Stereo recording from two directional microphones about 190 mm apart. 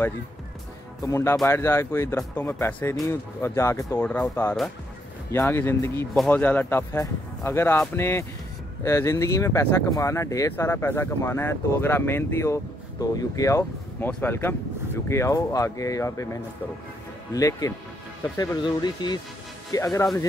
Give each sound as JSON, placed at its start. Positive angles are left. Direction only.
{"t": 1.0, "sound": "speech", "side_deg": 15}